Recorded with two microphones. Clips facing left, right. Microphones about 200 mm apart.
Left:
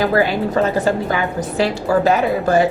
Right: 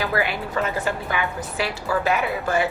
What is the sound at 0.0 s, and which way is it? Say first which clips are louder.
Speech: left 8 dB; 40° left (ahead or behind).